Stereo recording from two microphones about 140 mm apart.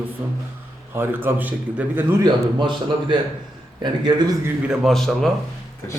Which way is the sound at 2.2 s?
35° right (ahead or behind).